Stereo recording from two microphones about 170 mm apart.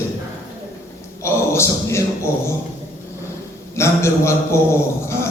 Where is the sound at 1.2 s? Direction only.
15° left (ahead or behind).